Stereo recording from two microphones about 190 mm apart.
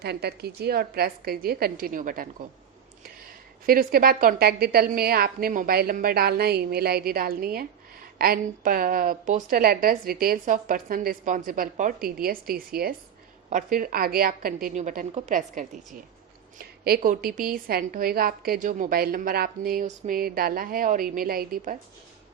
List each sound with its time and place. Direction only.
0.0 s a woman's voice: 60° right (ahead or behind)
3.7 s a woman's voice: 50° right (ahead or behind)